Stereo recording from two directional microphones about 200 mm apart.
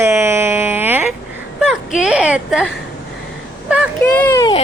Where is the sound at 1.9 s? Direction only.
5° right (ahead or behind).